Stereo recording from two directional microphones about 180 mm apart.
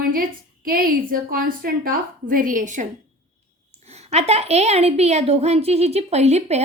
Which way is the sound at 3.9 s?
35° right (ahead or behind).